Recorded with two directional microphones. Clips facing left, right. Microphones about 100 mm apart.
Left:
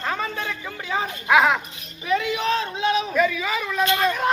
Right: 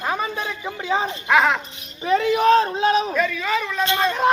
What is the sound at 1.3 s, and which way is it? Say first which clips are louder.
Speech: even; 5° left (ahead or behind).